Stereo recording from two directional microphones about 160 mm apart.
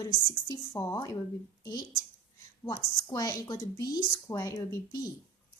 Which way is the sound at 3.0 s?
20° left (ahead or behind).